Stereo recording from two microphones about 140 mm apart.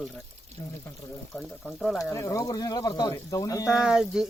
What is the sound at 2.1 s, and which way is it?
Speech, 20° left (ahead or behind).